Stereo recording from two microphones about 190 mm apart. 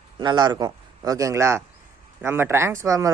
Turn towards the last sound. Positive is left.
turn(degrees=-15)  # may be behind; listen again after turning